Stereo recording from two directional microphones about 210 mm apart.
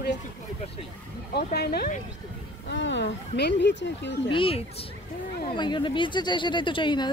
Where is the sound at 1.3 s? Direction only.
50° left (ahead or behind).